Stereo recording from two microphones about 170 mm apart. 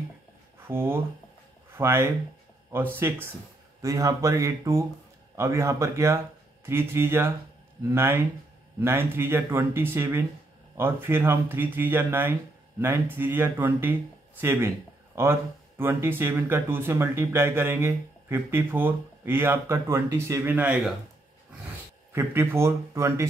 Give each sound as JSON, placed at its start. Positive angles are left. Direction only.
{"t": 0.7, "sound": "speech", "side_deg": -15}
{"t": 22.1, "sound": "speech", "side_deg": -15}